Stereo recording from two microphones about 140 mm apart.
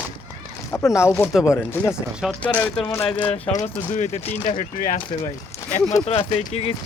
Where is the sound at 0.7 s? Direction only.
20° left (ahead or behind).